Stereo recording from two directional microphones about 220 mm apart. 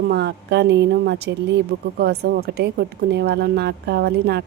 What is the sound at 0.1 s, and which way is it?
A woman's voice, 50° right (ahead or behind).